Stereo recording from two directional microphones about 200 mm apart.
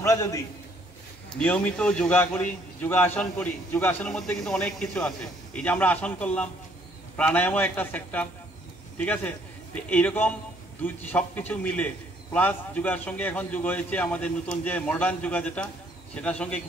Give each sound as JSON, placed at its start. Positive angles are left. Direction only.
{"t": 0.0, "sound": "a man's voice", "side_deg": 15}
{"t": 1.4, "sound": "a man's voice", "side_deg": 5}